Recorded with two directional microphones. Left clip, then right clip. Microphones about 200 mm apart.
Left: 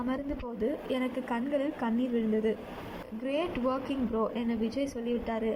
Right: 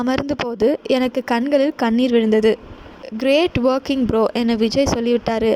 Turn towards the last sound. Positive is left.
turn(degrees=-60)  # may be behind; listen again after turning